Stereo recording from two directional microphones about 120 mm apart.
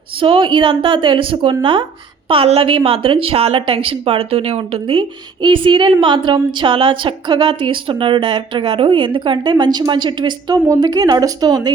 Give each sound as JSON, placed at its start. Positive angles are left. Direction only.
{"t": 0.2, "sound": "a woman's voice", "side_deg": -45}